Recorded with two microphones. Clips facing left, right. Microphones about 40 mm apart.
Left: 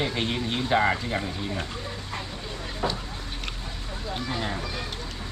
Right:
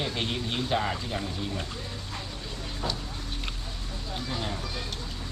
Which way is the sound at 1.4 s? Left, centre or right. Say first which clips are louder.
Left 2 dB; centre.